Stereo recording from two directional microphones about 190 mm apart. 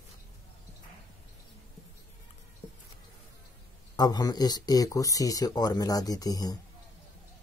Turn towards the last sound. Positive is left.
turn(degrees=20)  # may be behind; listen again after turning